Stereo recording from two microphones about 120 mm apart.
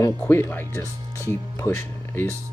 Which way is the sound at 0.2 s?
15° left (ahead or behind).